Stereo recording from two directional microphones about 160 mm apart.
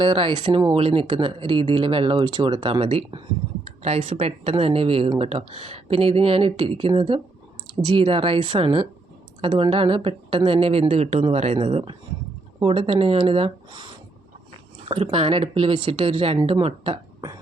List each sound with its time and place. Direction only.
0.0 s speech: 30° right (ahead or behind)